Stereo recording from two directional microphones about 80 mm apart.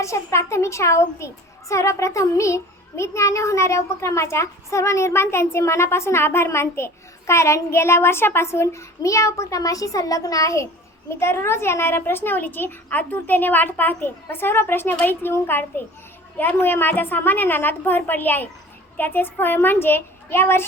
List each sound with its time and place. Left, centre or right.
0.0 s a child's voice: left